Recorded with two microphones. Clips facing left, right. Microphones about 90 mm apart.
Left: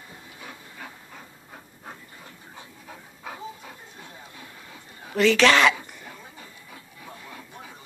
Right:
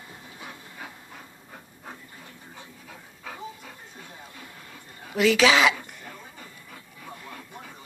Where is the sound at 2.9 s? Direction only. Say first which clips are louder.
Left 3 dB; 15° left (ahead or behind).